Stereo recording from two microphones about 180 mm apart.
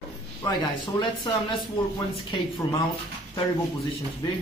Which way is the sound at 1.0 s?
25° left (ahead or behind).